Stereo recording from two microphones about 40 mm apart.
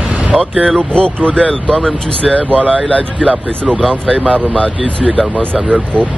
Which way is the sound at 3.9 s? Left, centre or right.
Left.